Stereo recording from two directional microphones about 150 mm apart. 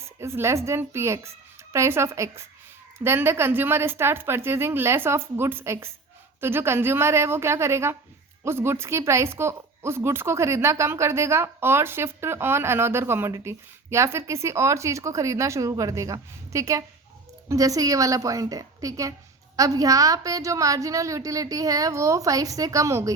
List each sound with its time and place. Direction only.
0.2 s a woman's voice: 15° right (ahead or behind)